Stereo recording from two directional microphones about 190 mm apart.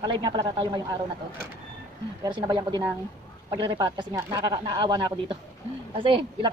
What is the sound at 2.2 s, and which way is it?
A woman's voice, 25° right (ahead or behind).